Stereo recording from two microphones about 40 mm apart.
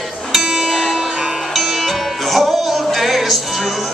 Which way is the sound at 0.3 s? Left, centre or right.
Centre.